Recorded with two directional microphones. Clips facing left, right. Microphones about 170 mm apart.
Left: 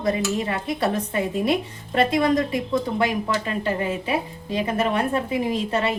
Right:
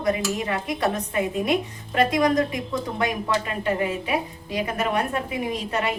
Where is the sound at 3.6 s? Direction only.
30° left (ahead or behind).